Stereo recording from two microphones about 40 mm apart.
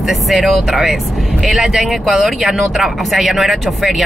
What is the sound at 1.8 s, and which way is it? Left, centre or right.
Speech, centre.